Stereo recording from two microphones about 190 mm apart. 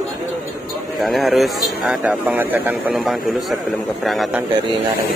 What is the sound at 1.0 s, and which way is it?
Speech, centre (ahead or behind).